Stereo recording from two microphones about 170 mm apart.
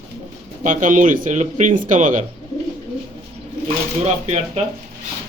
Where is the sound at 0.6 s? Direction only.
50° right (ahead or behind).